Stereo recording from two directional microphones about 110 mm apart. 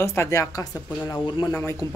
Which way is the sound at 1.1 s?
40° left (ahead or behind).